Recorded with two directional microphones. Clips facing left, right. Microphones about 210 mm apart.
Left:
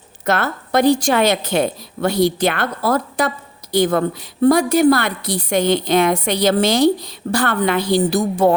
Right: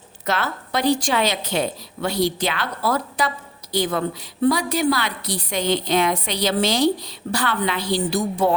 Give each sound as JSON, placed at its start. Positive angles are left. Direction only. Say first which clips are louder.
{"t": 0.3, "sound": "a woman's voice", "louder": "left 5 dB", "side_deg": 50}